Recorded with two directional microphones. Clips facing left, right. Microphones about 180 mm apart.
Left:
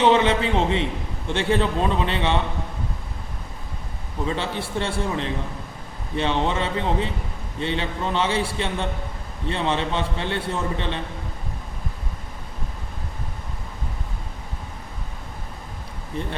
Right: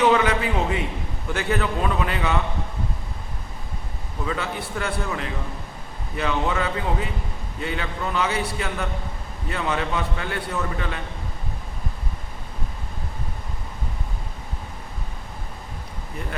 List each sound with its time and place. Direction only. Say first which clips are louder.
0.0 s a man's voice: left 1 dB; 25° left (ahead or behind)
4.3 s a man's voice: left 1 dB; 30° left (ahead or behind)
16.2 s a man's voice: left 5 dB; 30° left (ahead or behind)